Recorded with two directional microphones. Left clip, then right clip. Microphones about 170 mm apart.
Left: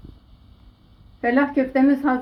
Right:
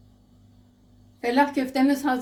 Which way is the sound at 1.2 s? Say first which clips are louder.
Left 2 dB; 35° left (ahead or behind).